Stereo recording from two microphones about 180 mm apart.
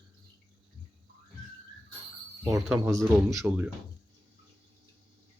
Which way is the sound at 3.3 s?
5° right (ahead or behind).